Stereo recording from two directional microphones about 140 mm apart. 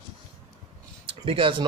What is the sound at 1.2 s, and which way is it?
Speech, 40° right (ahead or behind).